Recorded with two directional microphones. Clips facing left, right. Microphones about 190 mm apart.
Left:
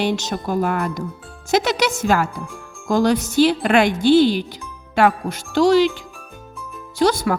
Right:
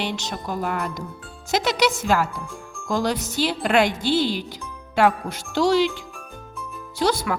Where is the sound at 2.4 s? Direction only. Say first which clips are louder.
Even; centre (ahead or behind).